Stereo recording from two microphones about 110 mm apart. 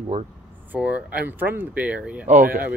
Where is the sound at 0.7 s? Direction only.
10° right (ahead or behind).